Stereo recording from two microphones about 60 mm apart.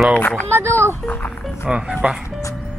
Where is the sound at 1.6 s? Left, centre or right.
Centre.